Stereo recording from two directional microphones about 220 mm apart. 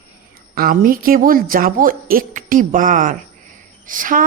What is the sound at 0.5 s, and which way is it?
A woman's voice, 40° right (ahead or behind).